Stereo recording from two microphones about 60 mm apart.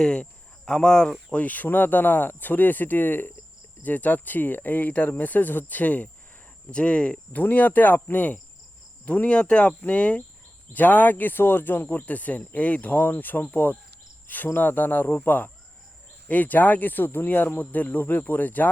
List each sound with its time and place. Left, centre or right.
0.0 s speech: centre
1.3 s speech: left